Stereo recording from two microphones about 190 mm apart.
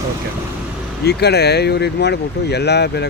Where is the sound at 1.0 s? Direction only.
60° left (ahead or behind).